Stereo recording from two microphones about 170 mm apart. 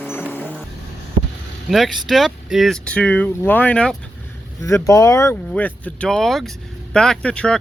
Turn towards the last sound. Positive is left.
turn(degrees=5)  # may be behind; listen again after turning